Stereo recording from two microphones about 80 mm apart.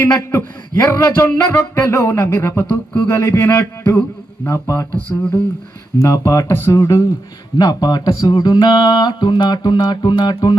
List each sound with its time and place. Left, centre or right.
0.3 s a man's voice: left
1.3 s music: centre
1.5 s music: left
3.5 s a man's voice: left
5.0 s music: left
6.0 s a man's voice: left
7.6 s speech: left
8.4 s music: left